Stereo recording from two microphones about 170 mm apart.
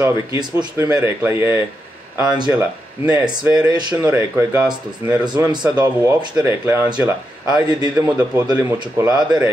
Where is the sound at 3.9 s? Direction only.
15° right (ahead or behind).